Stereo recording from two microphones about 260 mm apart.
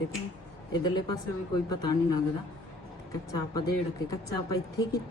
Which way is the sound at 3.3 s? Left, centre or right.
Centre.